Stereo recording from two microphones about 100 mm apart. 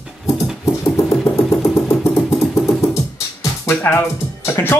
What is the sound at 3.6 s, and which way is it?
Speech, 20° left (ahead or behind).